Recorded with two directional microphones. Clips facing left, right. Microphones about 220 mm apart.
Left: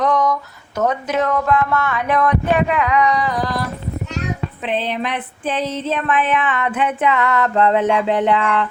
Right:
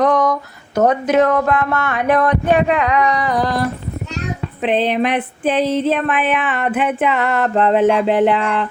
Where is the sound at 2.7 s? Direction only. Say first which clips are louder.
Right 1 dB; 40° right (ahead or behind).